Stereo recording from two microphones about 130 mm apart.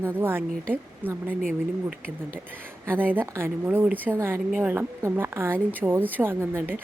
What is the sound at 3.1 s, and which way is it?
A woman's voice, 20° right (ahead or behind).